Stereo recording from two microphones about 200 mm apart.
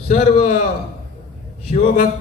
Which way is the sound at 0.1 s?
35° left (ahead or behind).